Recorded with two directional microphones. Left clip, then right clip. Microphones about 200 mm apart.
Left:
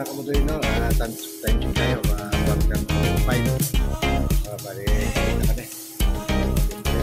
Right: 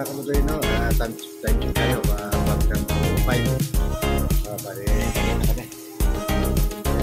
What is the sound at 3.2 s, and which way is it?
Speech, centre (ahead or behind).